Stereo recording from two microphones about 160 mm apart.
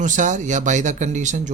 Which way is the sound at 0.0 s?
50° right (ahead or behind).